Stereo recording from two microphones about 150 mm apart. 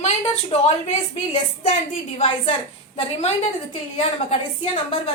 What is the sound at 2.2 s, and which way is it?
Speech, 50° left (ahead or behind).